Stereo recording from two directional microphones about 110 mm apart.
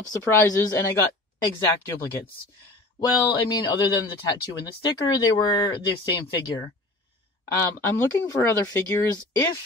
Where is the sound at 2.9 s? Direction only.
45° left (ahead or behind).